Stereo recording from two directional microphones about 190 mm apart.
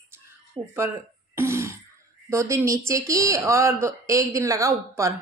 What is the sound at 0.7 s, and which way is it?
Throat clearing, 15° right (ahead or behind).